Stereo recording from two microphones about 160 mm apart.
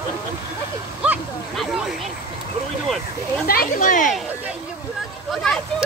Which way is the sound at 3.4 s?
60° left (ahead or behind).